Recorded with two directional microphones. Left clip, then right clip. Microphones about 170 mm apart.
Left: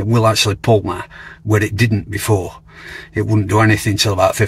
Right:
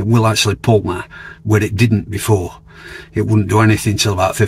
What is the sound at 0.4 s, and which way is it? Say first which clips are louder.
Speech: even; 5° left (ahead or behind).